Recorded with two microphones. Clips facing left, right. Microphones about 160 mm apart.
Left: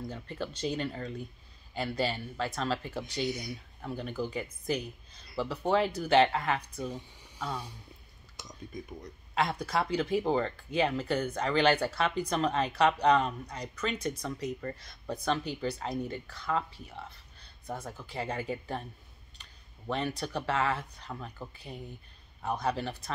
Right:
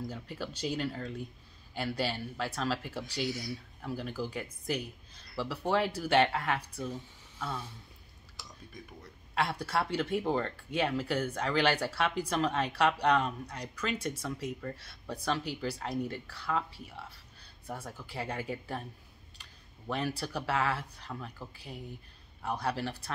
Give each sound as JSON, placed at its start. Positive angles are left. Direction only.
{"t": 0.0, "sound": "speech", "side_deg": -5}
{"t": 3.3, "sound": "speech", "side_deg": 20}
{"t": 3.8, "sound": "speech", "side_deg": 0}
{"t": 6.8, "sound": "speech", "side_deg": 10}
{"t": 9.3, "sound": "speech", "side_deg": -5}
{"t": 19.9, "sound": "speech", "side_deg": -5}